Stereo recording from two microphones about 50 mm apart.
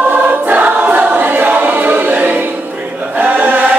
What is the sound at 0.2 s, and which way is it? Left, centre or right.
Choir, right.